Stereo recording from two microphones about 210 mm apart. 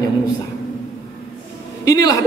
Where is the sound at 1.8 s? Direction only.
15° left (ahead or behind).